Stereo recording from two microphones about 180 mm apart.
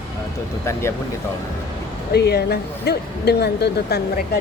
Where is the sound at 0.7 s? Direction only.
15° left (ahead or behind).